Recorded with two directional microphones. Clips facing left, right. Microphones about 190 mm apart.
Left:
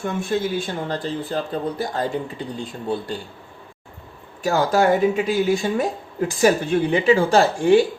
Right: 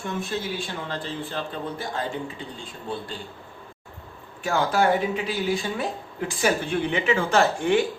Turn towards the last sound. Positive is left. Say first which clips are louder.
# left 5 dB
turn(degrees=30)  # may be behind; listen again after turning